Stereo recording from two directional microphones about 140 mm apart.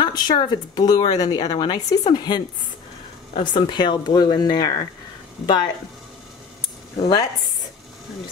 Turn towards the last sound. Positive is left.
turn(degrees=25)  # may be behind; listen again after turning